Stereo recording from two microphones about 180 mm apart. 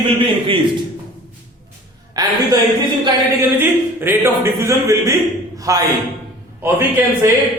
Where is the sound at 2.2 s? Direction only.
20° right (ahead or behind).